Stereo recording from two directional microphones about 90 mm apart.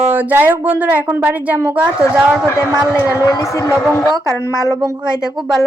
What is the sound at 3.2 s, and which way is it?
Speech, 35° left (ahead or behind).